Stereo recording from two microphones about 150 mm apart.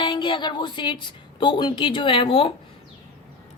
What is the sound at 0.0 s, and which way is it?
Speech, 30° left (ahead or behind).